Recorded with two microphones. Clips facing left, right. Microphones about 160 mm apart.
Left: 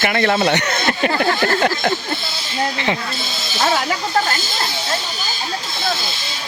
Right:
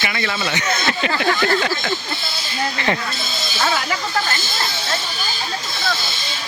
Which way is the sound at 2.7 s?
15° left (ahead or behind).